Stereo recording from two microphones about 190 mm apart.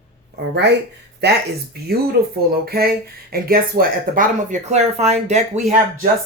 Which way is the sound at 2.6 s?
55° right (ahead or behind).